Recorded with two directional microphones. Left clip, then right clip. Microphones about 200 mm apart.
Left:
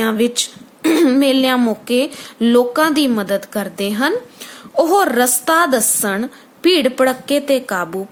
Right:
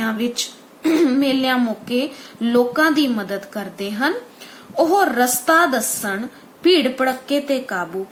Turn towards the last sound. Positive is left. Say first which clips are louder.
# left 4 dB
turn(degrees=55)  # may be behind; listen again after turning